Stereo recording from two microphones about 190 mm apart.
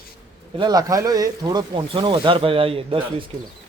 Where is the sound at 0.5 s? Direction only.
20° right (ahead or behind).